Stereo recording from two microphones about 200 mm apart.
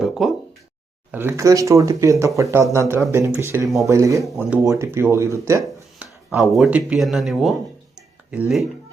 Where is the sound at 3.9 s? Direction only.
15° right (ahead or behind).